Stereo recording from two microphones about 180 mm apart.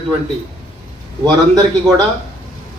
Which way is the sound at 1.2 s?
20° right (ahead or behind).